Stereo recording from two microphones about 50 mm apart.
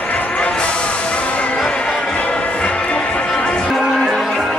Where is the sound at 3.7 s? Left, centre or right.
Centre.